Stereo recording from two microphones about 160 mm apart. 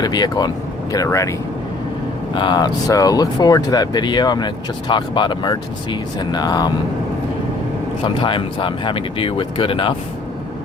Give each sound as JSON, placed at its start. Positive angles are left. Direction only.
{"t": 0.0, "sound": "speech", "side_deg": 25}
{"t": 2.3, "sound": "speech", "side_deg": 30}
{"t": 8.0, "sound": "speech", "side_deg": 35}